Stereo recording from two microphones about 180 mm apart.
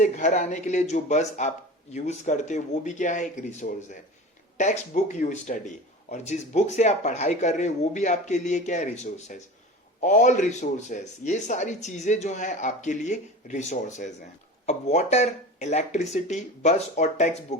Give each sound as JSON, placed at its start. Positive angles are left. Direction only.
{"t": 0.0, "sound": "a man's voice", "side_deg": 45}